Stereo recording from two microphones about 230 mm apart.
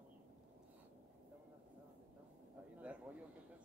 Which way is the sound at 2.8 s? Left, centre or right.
Centre.